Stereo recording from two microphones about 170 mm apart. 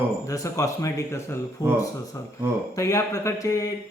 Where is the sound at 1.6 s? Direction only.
20° left (ahead or behind).